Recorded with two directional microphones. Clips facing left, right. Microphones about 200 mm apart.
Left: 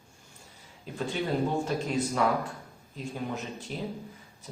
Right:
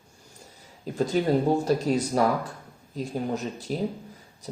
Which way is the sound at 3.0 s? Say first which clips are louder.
Right 6 dB; 40° right (ahead or behind).